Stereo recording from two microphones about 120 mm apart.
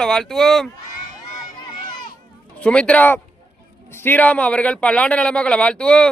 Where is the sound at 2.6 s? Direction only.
10° left (ahead or behind).